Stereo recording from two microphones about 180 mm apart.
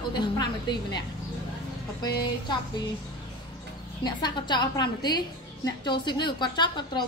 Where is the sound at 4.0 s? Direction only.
25° left (ahead or behind).